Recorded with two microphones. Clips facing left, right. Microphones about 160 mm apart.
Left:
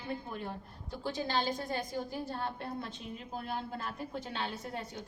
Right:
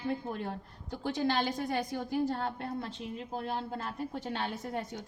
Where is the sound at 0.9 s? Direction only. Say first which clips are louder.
Right 3 dB; 70° right (ahead or behind).